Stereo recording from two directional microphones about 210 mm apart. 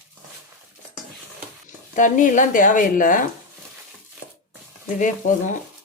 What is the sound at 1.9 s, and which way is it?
Speech, 35° left (ahead or behind).